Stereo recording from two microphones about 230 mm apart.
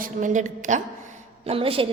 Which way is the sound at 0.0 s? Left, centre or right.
Right.